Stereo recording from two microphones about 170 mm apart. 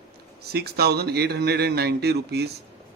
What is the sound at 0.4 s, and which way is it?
Speech, 70° right (ahead or behind).